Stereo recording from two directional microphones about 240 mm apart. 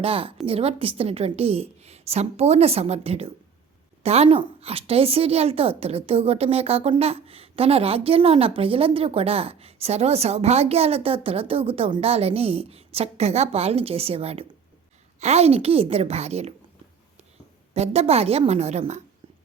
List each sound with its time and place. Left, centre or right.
0.0 s a woman's voice: right
17.7 s a woman's voice: right